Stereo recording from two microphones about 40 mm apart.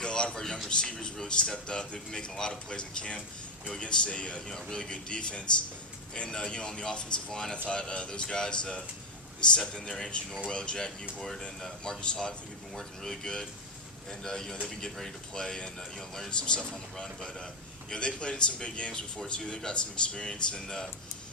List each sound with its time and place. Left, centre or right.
0.0 s a sound: left
0.7 s a man's voice: left
7.5 s a man's voice: left
9.8 s a man's voice: centre